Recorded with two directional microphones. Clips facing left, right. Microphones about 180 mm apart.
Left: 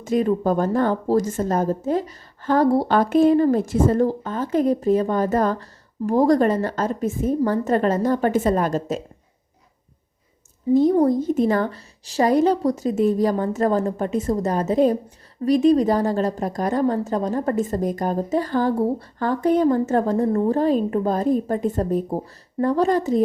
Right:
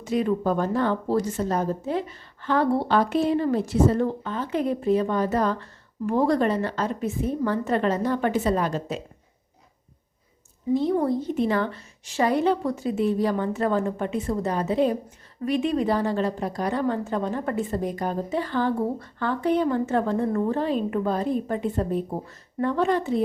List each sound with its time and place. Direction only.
0.0 s a woman's voice: 45° left (ahead or behind)
10.8 s a woman's voice: 40° left (ahead or behind)